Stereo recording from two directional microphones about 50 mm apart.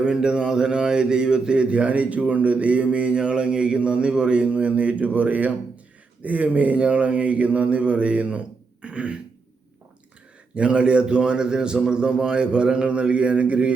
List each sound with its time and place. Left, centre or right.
0.0 s a man's voice: centre
8.8 s throat clearing: right
10.5 s a man's voice: right